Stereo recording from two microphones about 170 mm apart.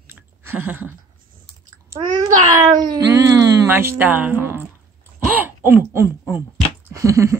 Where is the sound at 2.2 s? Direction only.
45° right (ahead or behind).